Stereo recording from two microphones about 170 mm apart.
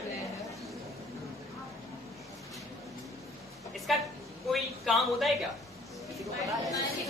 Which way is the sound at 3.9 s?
Centre (ahead or behind).